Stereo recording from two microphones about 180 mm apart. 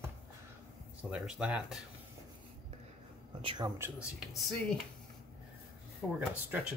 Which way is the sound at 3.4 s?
25° right (ahead or behind).